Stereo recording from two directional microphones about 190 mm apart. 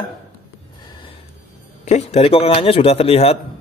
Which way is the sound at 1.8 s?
35° left (ahead or behind).